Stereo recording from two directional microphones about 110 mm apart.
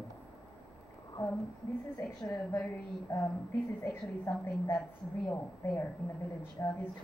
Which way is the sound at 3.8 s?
25° left (ahead or behind).